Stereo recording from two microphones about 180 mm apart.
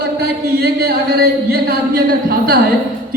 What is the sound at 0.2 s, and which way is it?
Speech, 60° right (ahead or behind).